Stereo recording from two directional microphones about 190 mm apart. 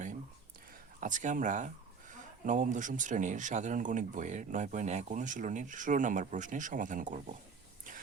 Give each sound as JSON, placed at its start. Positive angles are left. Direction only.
{"t": 0.9, "sound": "speech", "side_deg": -40}